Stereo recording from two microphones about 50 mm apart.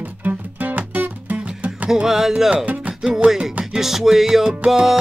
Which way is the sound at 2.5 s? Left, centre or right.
Right.